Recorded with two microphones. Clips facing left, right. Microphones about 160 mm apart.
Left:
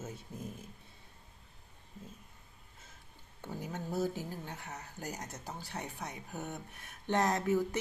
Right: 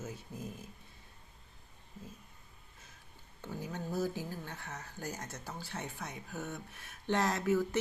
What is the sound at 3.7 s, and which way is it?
Speech, 20° left (ahead or behind).